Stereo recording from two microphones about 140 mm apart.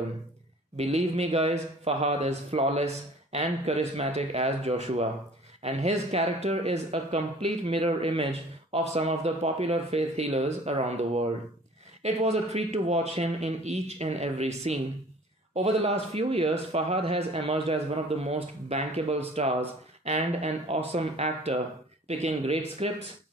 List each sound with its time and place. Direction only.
0.7 s a man's voice: 50° right (ahead or behind)